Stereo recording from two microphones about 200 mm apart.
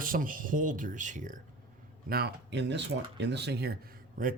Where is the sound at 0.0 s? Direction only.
45° right (ahead or behind).